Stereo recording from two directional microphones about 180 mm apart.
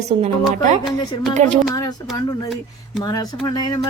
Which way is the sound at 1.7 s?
20° left (ahead or behind).